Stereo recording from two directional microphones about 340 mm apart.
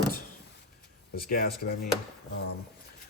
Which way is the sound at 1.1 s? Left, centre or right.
Left.